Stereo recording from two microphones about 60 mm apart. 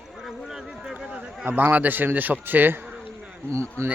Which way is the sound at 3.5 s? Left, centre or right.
Right.